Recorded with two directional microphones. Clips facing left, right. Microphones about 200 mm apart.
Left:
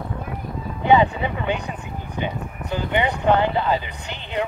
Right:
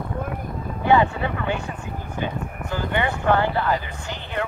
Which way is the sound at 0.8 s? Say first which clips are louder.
Left 2 dB; 20° left (ahead or behind).